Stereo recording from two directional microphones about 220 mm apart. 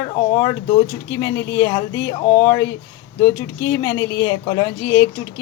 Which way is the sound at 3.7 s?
15° left (ahead or behind).